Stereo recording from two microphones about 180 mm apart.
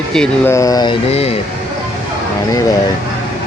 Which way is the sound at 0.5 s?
20° left (ahead or behind).